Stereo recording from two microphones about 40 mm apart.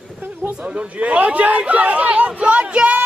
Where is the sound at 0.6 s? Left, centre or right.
Right.